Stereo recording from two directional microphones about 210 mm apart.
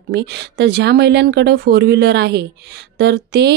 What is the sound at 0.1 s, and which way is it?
Speech, 55° right (ahead or behind).